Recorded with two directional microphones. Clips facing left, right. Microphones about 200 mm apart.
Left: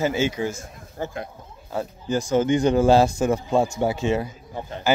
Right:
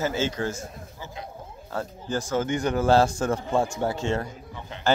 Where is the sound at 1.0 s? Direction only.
50° left (ahead or behind).